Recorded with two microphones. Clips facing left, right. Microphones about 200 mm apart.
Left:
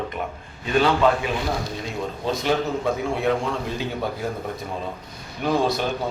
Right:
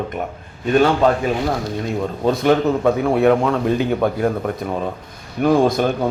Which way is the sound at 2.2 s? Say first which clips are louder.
Right 8 dB; 60° right (ahead or behind).